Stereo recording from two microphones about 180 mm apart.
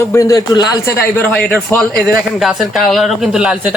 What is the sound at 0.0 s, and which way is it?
A man's voice, 15° left (ahead or behind).